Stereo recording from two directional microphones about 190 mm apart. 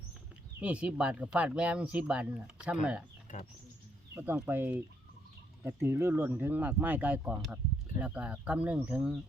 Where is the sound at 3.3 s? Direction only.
40° left (ahead or behind).